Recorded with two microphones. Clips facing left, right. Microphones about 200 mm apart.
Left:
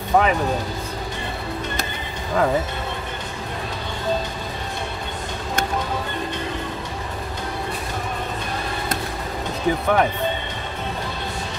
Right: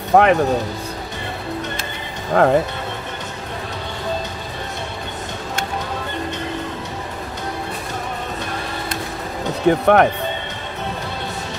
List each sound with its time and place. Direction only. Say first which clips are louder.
0.1 s speech: right 5 dB; 65° right (ahead or behind)
2.3 s speech: right 5 dB; 55° right (ahead or behind)
9.7 s speech: right 6 dB; 60° right (ahead or behind)